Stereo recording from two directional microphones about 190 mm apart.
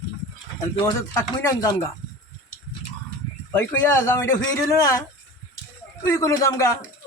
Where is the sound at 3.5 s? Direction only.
10° left (ahead or behind).